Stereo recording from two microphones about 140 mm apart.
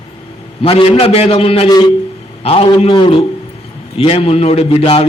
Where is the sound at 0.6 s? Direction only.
40° left (ahead or behind).